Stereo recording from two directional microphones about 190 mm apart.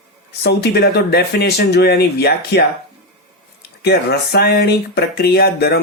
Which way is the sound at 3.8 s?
55° left (ahead or behind).